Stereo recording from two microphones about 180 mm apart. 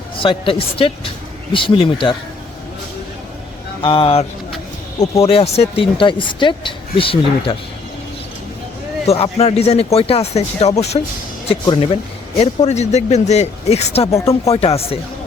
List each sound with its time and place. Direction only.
0.2 s speech: 30° left (ahead or behind)
3.8 s speech: 30° left (ahead or behind)
9.0 s speech: 35° left (ahead or behind)
11.6 s speech: 25° left (ahead or behind)
12.4 s speech: 40° left (ahead or behind)
14.1 s speech: 15° left (ahead or behind)
14.4 s speech: 35° left (ahead or behind)